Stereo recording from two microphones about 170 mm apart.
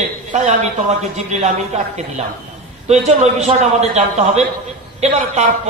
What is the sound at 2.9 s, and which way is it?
A man's voice, 40° right (ahead or behind).